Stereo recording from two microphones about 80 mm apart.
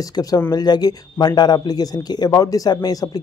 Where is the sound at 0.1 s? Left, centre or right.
Left.